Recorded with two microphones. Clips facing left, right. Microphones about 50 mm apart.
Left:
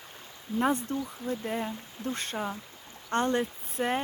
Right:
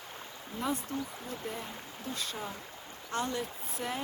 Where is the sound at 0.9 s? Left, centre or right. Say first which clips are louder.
Left 5 dB; left.